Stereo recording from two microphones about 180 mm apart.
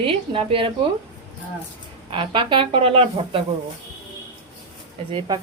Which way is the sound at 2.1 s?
25° right (ahead or behind).